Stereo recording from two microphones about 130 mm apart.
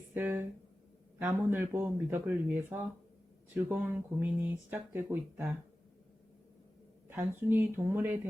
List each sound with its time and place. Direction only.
0.1 s speech: 15° right (ahead or behind)
7.2 s speech: 15° right (ahead or behind)